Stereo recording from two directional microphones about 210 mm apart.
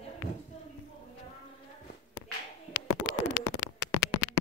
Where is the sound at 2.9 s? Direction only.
55° left (ahead or behind).